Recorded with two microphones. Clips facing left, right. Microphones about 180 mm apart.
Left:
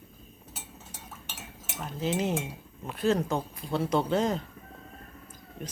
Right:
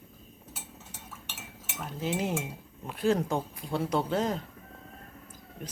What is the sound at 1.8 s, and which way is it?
Speech, 10° right (ahead or behind).